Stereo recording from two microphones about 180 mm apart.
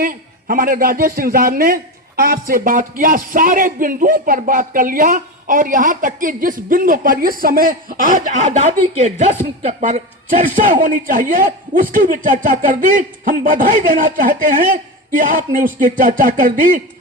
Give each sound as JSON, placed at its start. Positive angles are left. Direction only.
{"t": 0.0, "sound": "a man's voice", "side_deg": -50}